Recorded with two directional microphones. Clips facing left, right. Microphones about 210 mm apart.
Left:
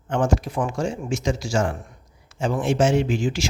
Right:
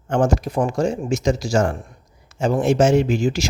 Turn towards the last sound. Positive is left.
turn(degrees=-40)  # may be behind; listen again after turning